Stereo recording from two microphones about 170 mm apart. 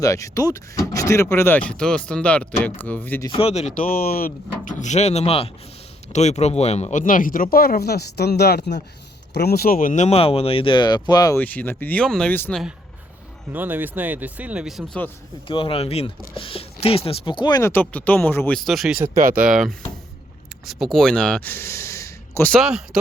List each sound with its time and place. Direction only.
0.0 s speech: 20° left (ahead or behind)
3.2 s speech: 35° left (ahead or behind)
11.3 s speech: 10° left (ahead or behind)
13.5 s speech: 10° right (ahead or behind)
15.4 s speech: 30° left (ahead or behind)
17.6 s speech: 10° left (ahead or behind)
19.1 s speech: 55° right (ahead or behind)
19.5 s speech: centre (ahead or behind); by 22.5 s 15° left (ahead or behind)
22.5 s speech: centre (ahead or behind)